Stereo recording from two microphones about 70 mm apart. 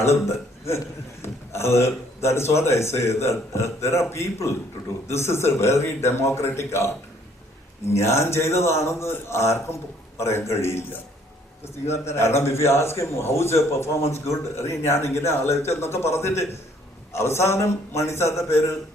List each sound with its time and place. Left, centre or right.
1.2 s a man's voice: left
7.9 s a man's voice: left